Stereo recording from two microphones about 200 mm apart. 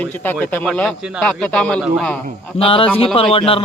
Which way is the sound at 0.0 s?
10° left (ahead or behind).